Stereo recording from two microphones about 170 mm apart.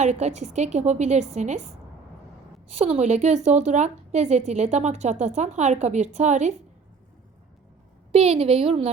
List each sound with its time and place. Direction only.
0.0 s a woman's voice: 40° right (ahead or behind)
2.6 s speech: 40° right (ahead or behind)
8.1 s a woman's voice: 35° right (ahead or behind)